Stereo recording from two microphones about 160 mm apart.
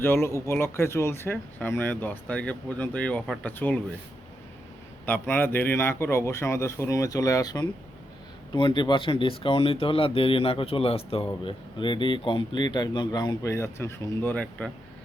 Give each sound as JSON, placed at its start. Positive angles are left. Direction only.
{"t": 0.0, "sound": "speech", "side_deg": 15}
{"t": 5.0, "sound": "speech", "side_deg": 10}